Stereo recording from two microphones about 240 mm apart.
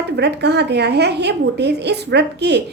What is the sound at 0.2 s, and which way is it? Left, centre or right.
A woman's voice, right.